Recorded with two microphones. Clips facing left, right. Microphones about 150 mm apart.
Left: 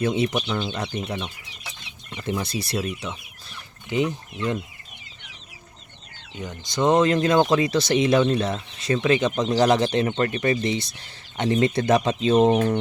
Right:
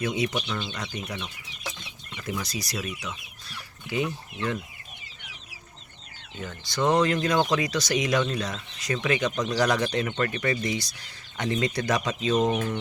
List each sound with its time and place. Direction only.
0.0 s speech: 30° left (ahead or behind)
6.4 s speech: 20° left (ahead or behind); by 12.8 s 35° left (ahead or behind)